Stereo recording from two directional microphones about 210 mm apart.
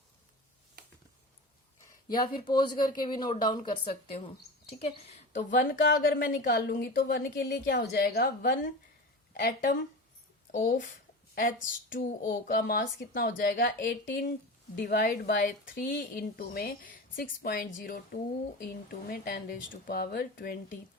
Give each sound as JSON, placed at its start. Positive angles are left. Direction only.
{"t": 2.0, "sound": "a woman's voice", "side_deg": 20}
{"t": 11.9, "sound": "a woman's voice", "side_deg": 40}